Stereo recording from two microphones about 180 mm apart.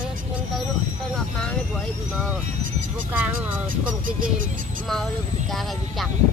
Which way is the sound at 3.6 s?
50° right (ahead or behind).